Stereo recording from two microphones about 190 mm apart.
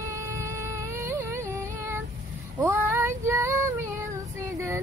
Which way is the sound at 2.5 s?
10° right (ahead or behind).